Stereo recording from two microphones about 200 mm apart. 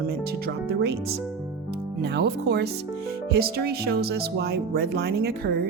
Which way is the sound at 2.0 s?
55° right (ahead or behind).